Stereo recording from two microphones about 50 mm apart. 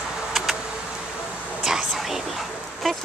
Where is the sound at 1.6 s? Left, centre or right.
Centre.